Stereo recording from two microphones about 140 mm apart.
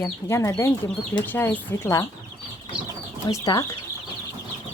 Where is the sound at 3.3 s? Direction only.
25° left (ahead or behind).